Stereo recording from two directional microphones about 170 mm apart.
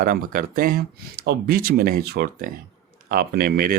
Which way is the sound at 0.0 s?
55° right (ahead or behind).